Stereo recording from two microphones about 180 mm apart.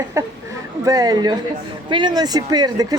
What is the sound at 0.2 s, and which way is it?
Speech, 15° right (ahead or behind).